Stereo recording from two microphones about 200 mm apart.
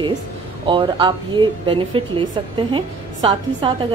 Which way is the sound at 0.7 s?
25° right (ahead or behind).